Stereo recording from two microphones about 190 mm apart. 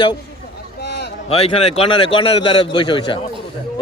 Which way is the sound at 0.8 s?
60° left (ahead or behind).